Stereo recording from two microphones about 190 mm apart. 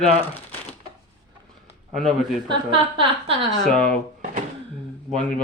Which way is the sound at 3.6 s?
5° left (ahead or behind).